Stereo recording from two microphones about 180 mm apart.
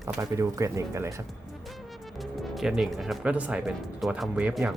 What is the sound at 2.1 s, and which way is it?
Speech, centre (ahead or behind).